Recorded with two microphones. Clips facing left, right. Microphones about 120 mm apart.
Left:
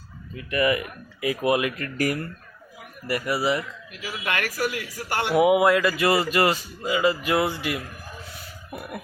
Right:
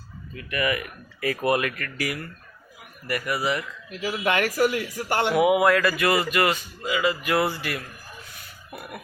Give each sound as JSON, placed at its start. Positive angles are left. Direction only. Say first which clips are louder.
{"t": 0.3, "sound": "speech", "louder": "left 4 dB", "side_deg": 25}
{"t": 1.2, "sound": "speech", "louder": "left 1 dB", "side_deg": 15}
{"t": 3.1, "sound": "speech", "louder": "left 2 dB", "side_deg": 25}
{"t": 4.0, "sound": "speech", "louder": "right 5 dB", "side_deg": -25}
{"t": 5.3, "sound": "speech", "louder": "left 2 dB", "side_deg": 25}